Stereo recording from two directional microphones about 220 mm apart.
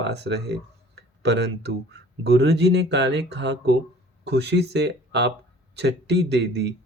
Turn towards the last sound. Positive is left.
turn(degrees=-50)  # may be behind; listen again after turning